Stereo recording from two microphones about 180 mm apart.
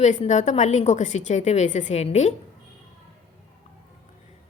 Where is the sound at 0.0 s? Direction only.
40° left (ahead or behind).